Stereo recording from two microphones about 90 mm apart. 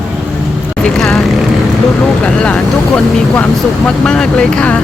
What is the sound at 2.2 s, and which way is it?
Speech, 15° left (ahead or behind).